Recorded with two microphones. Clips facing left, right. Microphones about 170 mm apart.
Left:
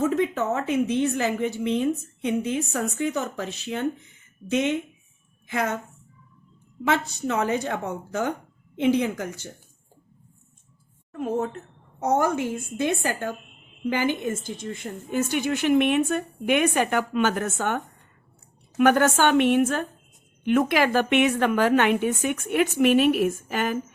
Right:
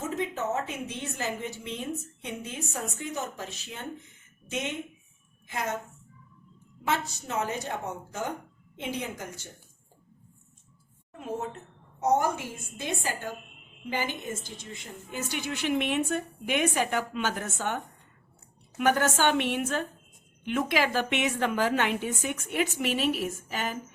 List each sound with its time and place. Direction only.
0.0 s a woman's voice: 65° left (ahead or behind)
5.5 s a woman's voice: 65° left (ahead or behind)
6.8 s a woman's voice: 65° left (ahead or behind)
11.2 s a woman's voice: 55° left (ahead or behind)
18.8 s a woman's voice: 60° left (ahead or behind)